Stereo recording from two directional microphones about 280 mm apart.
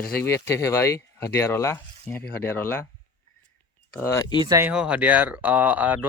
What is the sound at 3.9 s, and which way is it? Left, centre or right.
Speech, centre.